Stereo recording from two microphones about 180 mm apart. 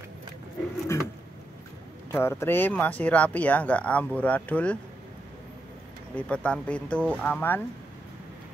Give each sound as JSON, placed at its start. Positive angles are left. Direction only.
{"t": 0.9, "sound": "a sound", "side_deg": 15}
{"t": 2.0, "sound": "speech", "side_deg": 15}
{"t": 6.1, "sound": "speech", "side_deg": 5}